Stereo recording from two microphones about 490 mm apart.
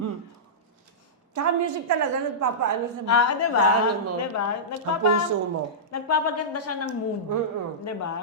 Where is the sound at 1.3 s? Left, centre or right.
Right.